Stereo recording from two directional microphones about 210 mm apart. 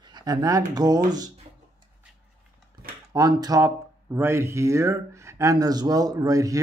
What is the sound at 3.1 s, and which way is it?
Speech, 20° right (ahead or behind).